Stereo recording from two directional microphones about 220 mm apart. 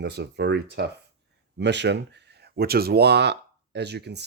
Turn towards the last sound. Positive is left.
turn(degrees=-50)  # may be behind; listen again after turning